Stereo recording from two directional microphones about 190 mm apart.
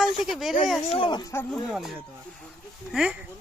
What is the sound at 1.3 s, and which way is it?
Speech, 10° left (ahead or behind).